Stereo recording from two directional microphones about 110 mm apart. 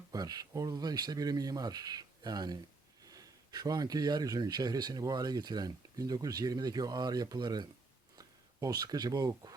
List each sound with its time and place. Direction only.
0.1 s speech: 35° right (ahead or behind)